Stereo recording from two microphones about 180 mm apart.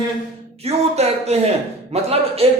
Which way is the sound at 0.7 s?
35° right (ahead or behind).